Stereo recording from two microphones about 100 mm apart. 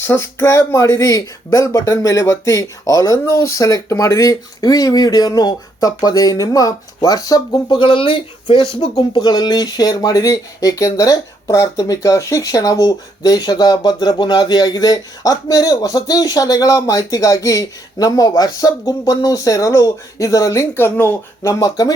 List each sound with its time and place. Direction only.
0.1 s speech: 25° left (ahead or behind)
7.8 s speech: 60° left (ahead or behind); by 20.7 s 35° left (ahead or behind)
20.9 s speech: 20° left (ahead or behind)
21.6 s speech: 40° left (ahead or behind)